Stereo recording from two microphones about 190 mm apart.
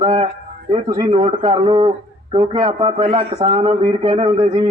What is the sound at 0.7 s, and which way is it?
A man's voice, 20° right (ahead or behind).